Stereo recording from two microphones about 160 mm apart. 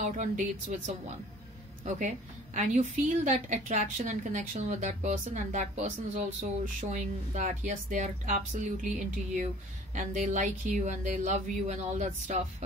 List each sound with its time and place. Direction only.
0.0 s a woman's voice: 50° right (ahead or behind)